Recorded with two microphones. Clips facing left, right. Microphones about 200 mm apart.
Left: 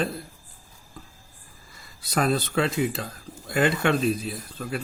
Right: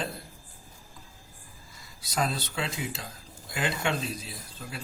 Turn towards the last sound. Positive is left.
turn(degrees=55)  # may be behind; listen again after turning